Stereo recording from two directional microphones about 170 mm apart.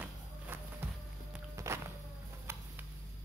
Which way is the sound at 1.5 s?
15° right (ahead or behind).